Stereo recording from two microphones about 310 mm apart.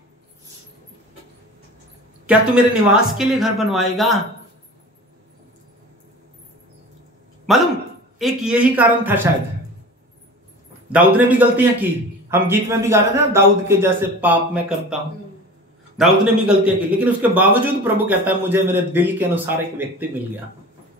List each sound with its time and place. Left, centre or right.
2.2 s a man's voice: centre
7.5 s a man's voice: centre
10.9 s a man's voice: centre
16.0 s a man's voice: centre